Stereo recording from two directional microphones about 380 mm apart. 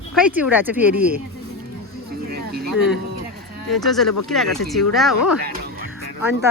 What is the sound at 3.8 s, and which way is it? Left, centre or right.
Speech, centre.